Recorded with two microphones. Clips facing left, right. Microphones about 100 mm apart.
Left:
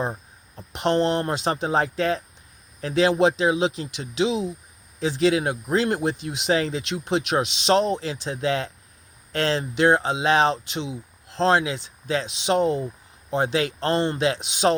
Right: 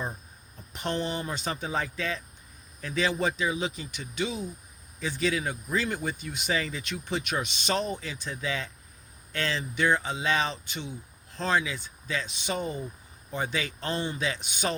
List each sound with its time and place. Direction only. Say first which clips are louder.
0.5 s speech: left 10 dB; 90° left